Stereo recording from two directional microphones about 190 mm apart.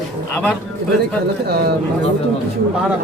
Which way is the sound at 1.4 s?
55° right (ahead or behind).